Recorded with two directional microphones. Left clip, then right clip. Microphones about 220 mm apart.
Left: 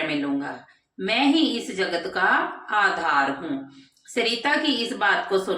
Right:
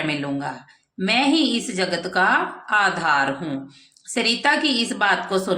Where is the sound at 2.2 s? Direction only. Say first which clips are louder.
Right 3 dB; 50° right (ahead or behind).